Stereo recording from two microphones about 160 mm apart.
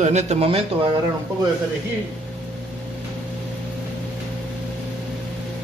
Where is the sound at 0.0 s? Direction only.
45° right (ahead or behind).